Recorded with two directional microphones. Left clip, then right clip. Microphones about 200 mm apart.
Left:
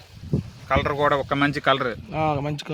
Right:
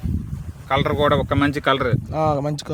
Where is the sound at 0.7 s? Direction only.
55° right (ahead or behind).